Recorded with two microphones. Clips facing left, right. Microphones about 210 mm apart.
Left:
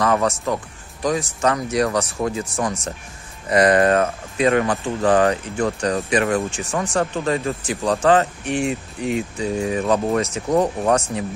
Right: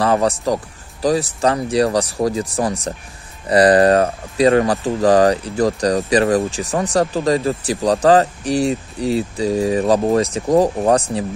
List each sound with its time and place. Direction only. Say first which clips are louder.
0.0 s speech: right 3 dB; 30° right (ahead or behind)